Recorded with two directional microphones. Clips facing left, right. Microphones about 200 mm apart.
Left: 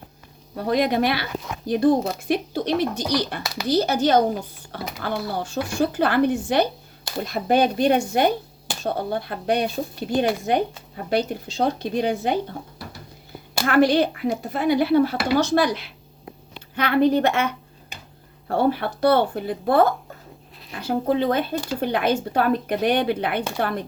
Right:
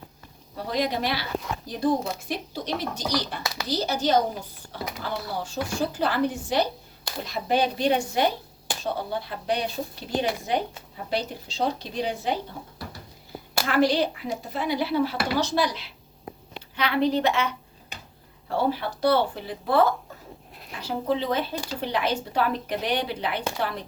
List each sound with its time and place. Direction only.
0.5 s speech: 55° left (ahead or behind)
13.7 s speech: 55° left (ahead or behind)